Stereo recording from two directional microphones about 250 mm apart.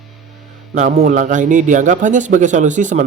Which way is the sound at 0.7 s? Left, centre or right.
Right.